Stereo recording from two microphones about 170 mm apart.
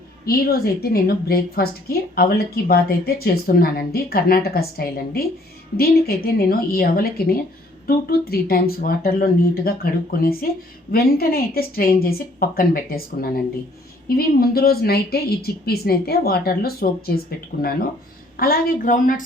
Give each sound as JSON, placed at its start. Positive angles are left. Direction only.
{"t": 0.3, "sound": "a woman's voice", "side_deg": 60}